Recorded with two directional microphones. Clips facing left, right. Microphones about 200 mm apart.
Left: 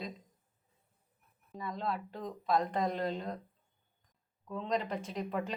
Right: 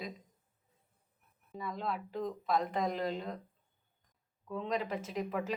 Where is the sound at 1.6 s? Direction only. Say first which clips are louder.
Left 1 dB; 5° right (ahead or behind).